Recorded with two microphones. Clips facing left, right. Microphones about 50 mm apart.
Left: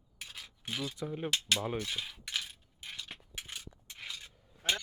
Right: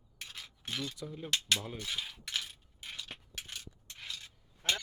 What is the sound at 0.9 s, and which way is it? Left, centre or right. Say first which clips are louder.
Speech: left 6 dB; left.